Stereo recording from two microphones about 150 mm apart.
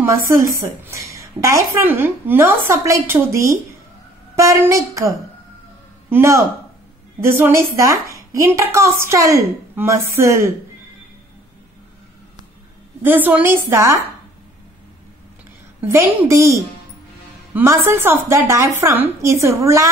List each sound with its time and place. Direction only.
0.5 s a woman's voice: 20° right (ahead or behind)
13.0 s a woman's voice: 10° right (ahead or behind)
15.8 s a woman's voice: 15° right (ahead or behind)